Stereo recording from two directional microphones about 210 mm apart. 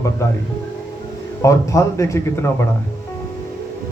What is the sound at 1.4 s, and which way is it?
Speech, 15° left (ahead or behind).